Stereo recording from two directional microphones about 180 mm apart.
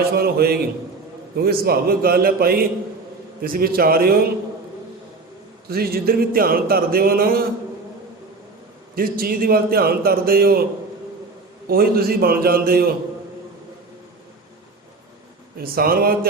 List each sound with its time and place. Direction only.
0.0 s speech: 60° right (ahead or behind)
5.6 s speech: 60° right (ahead or behind)
9.0 s speech: 55° right (ahead or behind)
11.7 s speech: 55° right (ahead or behind)
15.5 s speech: 55° right (ahead or behind)